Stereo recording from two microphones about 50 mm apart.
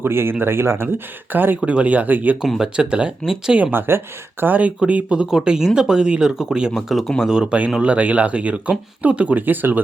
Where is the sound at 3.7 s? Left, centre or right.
Right.